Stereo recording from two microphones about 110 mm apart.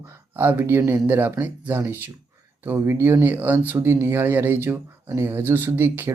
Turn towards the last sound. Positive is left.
turn(degrees=-20)  # may be behind; listen again after turning